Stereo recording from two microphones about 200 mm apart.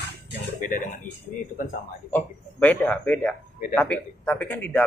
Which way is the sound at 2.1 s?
10° left (ahead or behind).